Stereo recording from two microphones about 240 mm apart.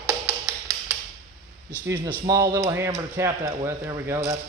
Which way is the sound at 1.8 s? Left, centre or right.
Centre.